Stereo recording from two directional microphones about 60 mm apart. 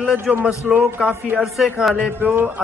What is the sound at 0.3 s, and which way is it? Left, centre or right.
Speech, centre.